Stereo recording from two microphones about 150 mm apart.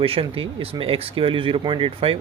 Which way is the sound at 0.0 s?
40° right (ahead or behind).